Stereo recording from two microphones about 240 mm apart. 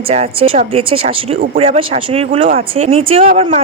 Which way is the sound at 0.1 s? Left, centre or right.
Right.